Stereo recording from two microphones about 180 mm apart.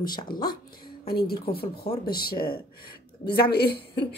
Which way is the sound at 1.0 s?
55° left (ahead or behind).